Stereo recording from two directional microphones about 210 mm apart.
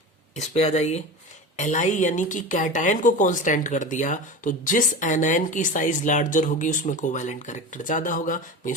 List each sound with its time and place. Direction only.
0.3 s a woman's voice: 30° left (ahead or behind)